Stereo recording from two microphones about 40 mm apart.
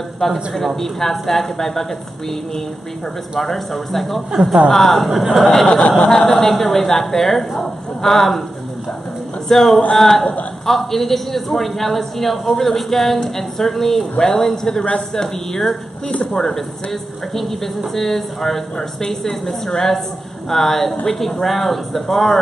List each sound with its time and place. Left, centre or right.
0.2 s a woman's voice: centre
3.3 s a woman's voice: centre
4.6 s a woman's voice: centre
5.7 s a sound: left
6.0 s speech: centre
6.3 s a woman's voice: centre
9.5 s a woman's voice: centre
16.1 s speech: left
16.3 s a woman's voice: centre